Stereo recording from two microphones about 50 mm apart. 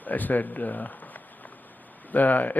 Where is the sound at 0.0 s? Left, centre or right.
Left.